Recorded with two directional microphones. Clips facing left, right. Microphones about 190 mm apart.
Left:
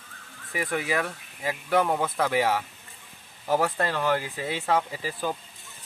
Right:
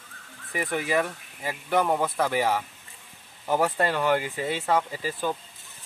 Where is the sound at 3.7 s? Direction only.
15° right (ahead or behind).